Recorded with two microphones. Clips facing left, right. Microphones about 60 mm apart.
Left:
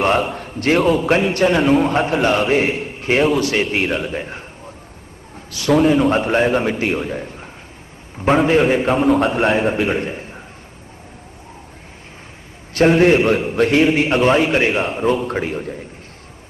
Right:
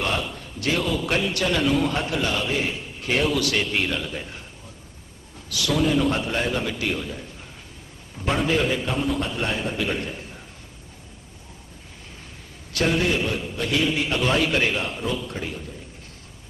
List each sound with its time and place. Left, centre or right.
0.0 s a man's voice: left
3.0 s a man's voice: left
5.5 s a man's voice: left
12.7 s a man's voice: left